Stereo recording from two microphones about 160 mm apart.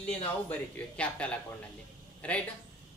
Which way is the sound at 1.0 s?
5° left (ahead or behind).